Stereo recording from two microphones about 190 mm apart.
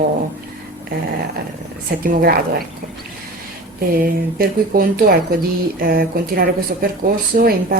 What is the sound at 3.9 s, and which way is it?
Speech, 50° right (ahead or behind).